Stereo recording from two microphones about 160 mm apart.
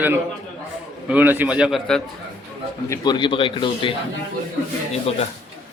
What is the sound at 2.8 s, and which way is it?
A man's voice, 20° left (ahead or behind).